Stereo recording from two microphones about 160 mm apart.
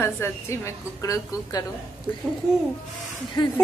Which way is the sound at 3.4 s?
30° left (ahead or behind).